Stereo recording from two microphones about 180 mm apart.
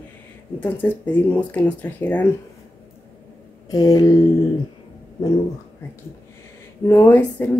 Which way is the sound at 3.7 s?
20° left (ahead or behind).